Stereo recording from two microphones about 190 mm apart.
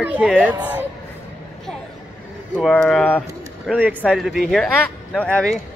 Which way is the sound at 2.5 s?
Centre (ahead or behind).